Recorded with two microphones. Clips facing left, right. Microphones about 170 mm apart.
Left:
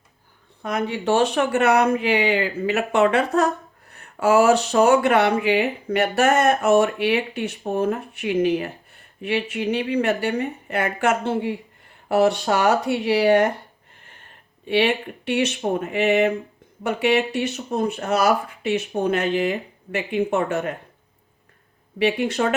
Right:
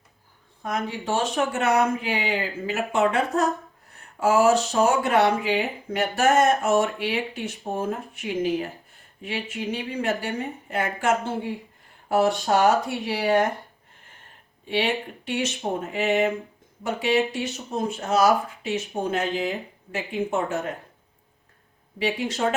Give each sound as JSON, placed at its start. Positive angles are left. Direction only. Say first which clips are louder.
{"t": 0.6, "sound": "speech", "louder": "left 4 dB", "side_deg": 70}
{"t": 14.6, "sound": "speech", "louder": "left 5 dB", "side_deg": 65}
{"t": 21.9, "sound": "speech", "louder": "left 6 dB", "side_deg": 65}